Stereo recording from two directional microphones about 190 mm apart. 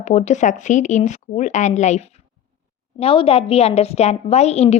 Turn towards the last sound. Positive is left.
turn(degrees=35)  # may be behind; listen again after turning